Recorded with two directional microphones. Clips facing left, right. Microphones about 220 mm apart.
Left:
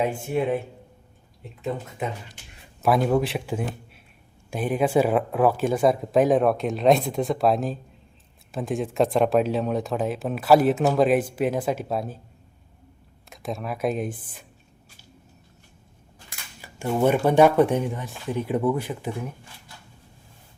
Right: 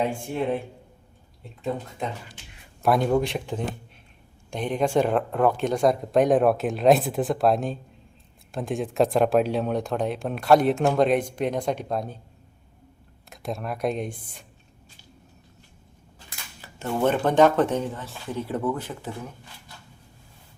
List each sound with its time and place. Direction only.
2.8 s speech: centre (ahead or behind)
13.3 s speech: centre (ahead or behind)
16.6 s speech: 15° left (ahead or behind)